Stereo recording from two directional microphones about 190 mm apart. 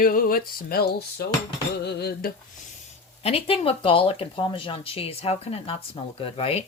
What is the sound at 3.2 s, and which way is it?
Speech, 30° left (ahead or behind).